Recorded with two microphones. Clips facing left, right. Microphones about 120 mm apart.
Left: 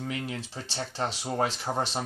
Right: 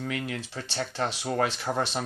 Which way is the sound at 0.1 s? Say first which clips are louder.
Right 2 dB; 25° left (ahead or behind).